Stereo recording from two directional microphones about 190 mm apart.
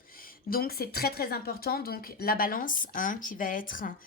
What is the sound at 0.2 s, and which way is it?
A woman's voice, 50° left (ahead or behind).